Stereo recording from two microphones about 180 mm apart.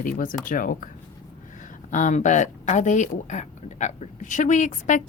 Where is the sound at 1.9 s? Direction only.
45° left (ahead or behind).